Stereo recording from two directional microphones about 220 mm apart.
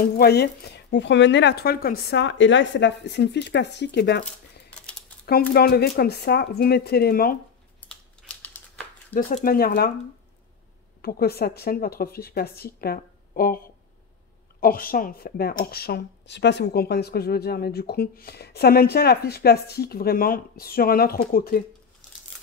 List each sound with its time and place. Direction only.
0.2 s speech: 45° left (ahead or behind)
5.5 s speech: 45° left (ahead or behind)
7.9 s typing: 5° left (ahead or behind)
9.1 s speech: 35° left (ahead or behind)
11.0 s speech: 45° left (ahead or behind)